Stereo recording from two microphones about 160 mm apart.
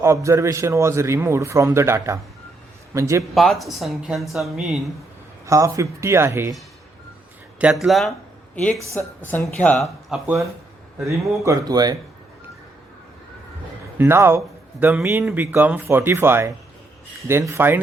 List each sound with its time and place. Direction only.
0.0 s a man's voice: 20° right (ahead or behind)
3.3 s speech: centre (ahead or behind)
5.5 s speech: 20° right (ahead or behind)
7.6 s speech: centre (ahead or behind)
9.0 s speech: 10° left (ahead or behind)
10.1 s a man's voice: 10° right (ahead or behind)
11.0 s speech: 20° right (ahead or behind)
14.0 s speech: 15° right (ahead or behind)
15.2 s a man's voice: centre (ahead or behind)